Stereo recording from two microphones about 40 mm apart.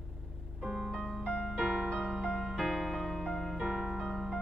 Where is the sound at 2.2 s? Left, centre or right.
Centre.